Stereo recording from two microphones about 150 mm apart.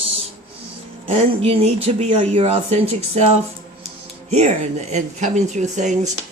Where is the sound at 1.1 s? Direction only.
40° right (ahead or behind).